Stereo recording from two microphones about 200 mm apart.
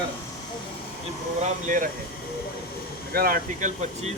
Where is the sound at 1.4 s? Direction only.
40° right (ahead or behind).